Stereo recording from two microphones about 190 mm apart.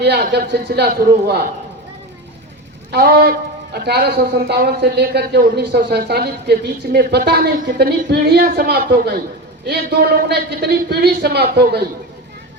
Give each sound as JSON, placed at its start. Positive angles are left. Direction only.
{"t": 0.0, "sound": "a woman's voice", "side_deg": -60}
{"t": 2.9, "sound": "a woman's voice", "side_deg": -55}